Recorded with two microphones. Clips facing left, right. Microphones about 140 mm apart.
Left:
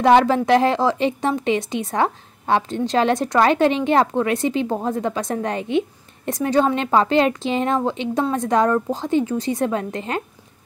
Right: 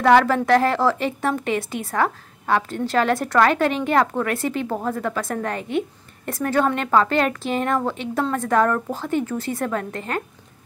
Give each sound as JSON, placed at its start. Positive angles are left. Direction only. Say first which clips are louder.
{"t": 0.0, "sound": "a woman's voice", "louder": "left 1 dB", "side_deg": 20}